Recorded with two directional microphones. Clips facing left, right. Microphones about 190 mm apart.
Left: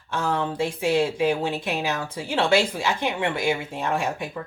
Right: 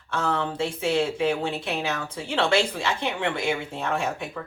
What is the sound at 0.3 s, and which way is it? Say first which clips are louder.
Speech: left 2 dB; 15° left (ahead or behind).